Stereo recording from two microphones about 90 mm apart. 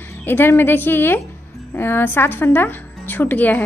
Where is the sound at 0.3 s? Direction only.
25° left (ahead or behind).